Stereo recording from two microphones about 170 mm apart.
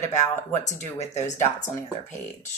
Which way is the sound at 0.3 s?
45° left (ahead or behind).